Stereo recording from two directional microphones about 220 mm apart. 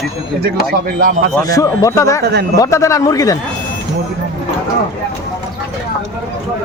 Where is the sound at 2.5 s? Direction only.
15° left (ahead or behind).